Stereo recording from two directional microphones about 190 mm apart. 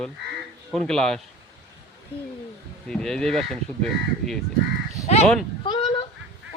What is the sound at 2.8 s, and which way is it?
Speech, 5° left (ahead or behind).